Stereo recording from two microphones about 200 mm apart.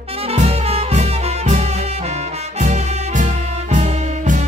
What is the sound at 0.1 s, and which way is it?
Music, 30° right (ahead or behind).